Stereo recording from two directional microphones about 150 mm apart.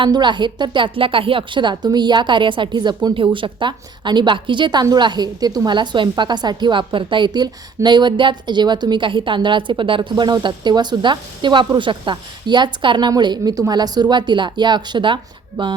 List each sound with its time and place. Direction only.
0.0 s a woman's voice: 30° right (ahead or behind)